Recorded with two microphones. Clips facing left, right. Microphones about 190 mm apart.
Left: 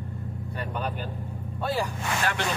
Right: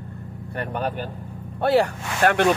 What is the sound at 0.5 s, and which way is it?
Speech, 50° right (ahead or behind).